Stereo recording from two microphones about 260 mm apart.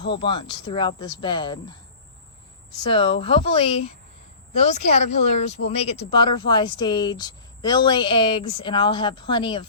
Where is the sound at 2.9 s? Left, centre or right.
Left.